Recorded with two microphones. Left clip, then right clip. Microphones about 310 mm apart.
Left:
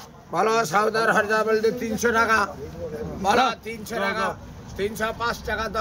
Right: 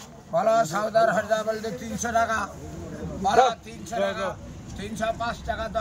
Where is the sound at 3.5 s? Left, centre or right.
Left.